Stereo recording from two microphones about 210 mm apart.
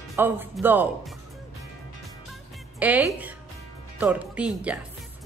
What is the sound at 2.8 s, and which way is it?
A woman's voice, 5° right (ahead or behind).